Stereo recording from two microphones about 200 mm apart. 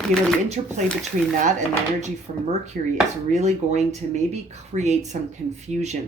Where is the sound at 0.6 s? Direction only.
25° right (ahead or behind).